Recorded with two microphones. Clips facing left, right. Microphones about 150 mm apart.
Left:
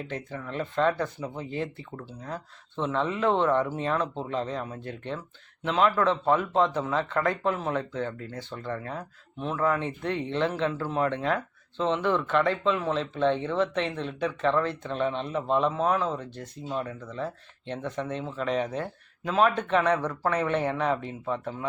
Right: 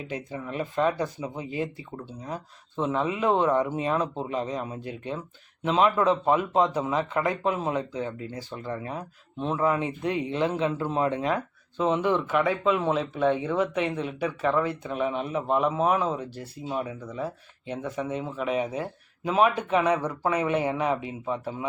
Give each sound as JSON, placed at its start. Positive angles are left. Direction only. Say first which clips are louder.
{"t": 0.1, "sound": "speech", "louder": "right 1 dB", "side_deg": -15}